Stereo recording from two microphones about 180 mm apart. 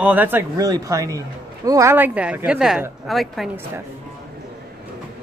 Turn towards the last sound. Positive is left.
turn(degrees=0)  # may be behind; listen again after turning